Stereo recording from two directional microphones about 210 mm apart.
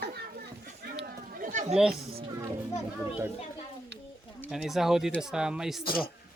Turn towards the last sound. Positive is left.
turn(degrees=-5)  # may be behind; listen again after turning